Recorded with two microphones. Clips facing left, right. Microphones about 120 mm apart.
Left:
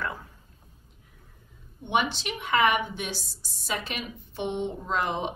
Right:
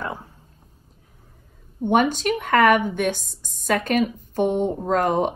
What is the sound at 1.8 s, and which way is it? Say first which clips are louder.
A woman's voice: right 8 dB; 45° right (ahead or behind).